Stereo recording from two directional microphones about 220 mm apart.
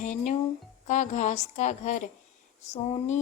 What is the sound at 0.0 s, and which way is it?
Speech, 35° left (ahead or behind).